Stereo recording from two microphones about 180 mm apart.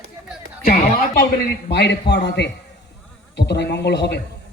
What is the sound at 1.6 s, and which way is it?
Speech, 70° left (ahead or behind).